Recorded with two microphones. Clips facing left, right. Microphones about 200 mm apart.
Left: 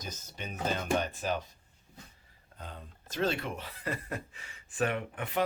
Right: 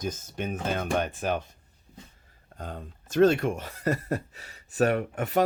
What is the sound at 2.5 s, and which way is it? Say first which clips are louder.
Speech: right 8 dB; 45° right (ahead or behind).